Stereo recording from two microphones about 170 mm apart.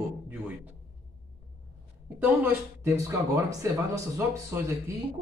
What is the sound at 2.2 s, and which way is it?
Speech, 10° right (ahead or behind).